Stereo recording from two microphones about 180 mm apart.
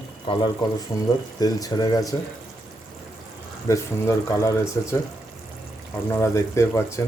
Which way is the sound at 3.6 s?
15° left (ahead or behind).